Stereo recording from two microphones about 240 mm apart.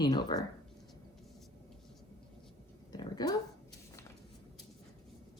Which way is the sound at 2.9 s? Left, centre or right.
Centre.